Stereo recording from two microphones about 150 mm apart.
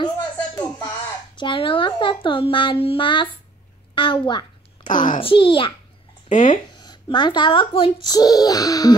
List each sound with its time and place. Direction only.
0.0 s a sound: 30° left (ahead or behind)
3.9 s a child's voice: 35° left (ahead or behind)
4.8 s a child's voice: 60° left (ahead or behind)
5.2 s a child's voice: 35° left (ahead or behind)
6.2 s speech: 55° left (ahead or behind)
6.5 s speech: 30° left (ahead or behind)